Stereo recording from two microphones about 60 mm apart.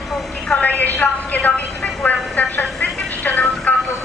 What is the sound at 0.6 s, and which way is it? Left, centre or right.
A woman's voice, left.